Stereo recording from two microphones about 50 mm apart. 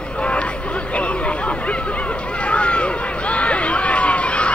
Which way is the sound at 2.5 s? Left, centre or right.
Left.